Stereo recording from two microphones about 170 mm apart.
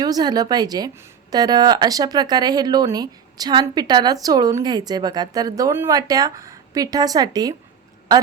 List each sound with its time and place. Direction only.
0.0 s speech: 25° right (ahead or behind)